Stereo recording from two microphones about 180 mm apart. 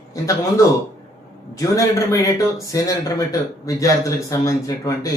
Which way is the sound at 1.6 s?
15° left (ahead or behind).